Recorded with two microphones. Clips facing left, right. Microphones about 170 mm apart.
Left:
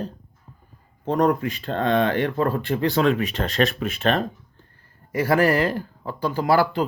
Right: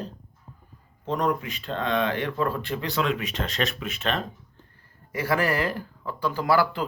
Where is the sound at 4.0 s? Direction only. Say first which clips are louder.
Left 7 dB; 50° left (ahead or behind).